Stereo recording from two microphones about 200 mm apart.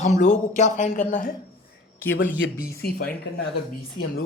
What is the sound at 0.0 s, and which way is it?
Speech, 35° left (ahead or behind).